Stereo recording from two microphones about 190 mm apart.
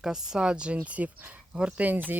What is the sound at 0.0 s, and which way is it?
Speech, 5° right (ahead or behind).